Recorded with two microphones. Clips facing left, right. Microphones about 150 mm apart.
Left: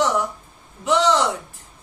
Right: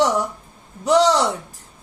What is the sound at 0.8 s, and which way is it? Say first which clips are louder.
Speech: right 3 dB; 40° right (ahead or behind).